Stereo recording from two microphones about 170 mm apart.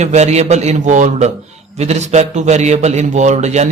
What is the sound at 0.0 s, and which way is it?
A man's voice, 40° right (ahead or behind).